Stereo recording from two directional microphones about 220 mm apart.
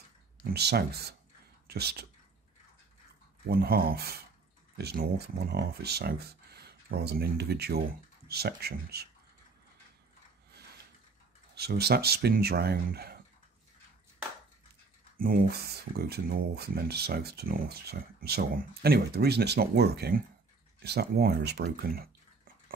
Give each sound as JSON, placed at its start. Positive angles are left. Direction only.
{"t": 0.4, "sound": "speech", "side_deg": -45}
{"t": 3.4, "sound": "speech", "side_deg": -45}
{"t": 11.5, "sound": "speech", "side_deg": -45}
{"t": 15.1, "sound": "speech", "side_deg": -40}